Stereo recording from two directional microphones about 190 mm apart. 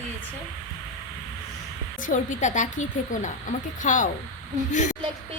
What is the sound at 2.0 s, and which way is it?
A woman's voice, 40° left (ahead or behind).